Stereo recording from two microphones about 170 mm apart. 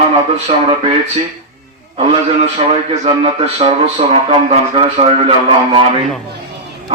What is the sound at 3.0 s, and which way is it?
A man's voice, 35° right (ahead or behind).